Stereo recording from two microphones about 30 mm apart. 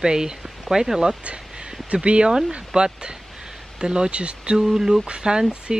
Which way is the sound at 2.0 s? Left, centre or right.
Right.